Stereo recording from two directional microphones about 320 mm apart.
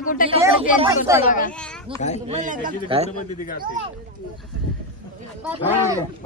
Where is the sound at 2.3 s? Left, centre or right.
Right.